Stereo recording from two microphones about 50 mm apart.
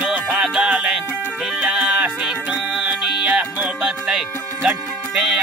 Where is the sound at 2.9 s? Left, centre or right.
Right.